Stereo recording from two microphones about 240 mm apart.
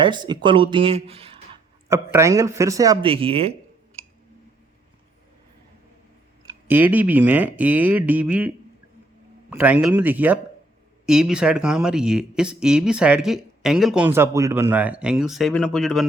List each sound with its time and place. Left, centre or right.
0.0 s speech: centre
2.1 s speech: centre
6.4 s speech: centre